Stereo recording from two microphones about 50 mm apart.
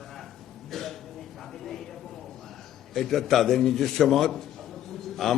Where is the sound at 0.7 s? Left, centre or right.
Centre.